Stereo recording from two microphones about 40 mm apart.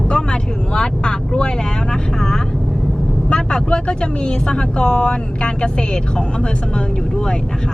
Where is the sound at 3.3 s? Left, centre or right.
Centre.